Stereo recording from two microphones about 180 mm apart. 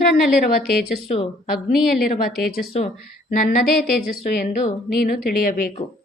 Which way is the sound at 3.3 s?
50° left (ahead or behind).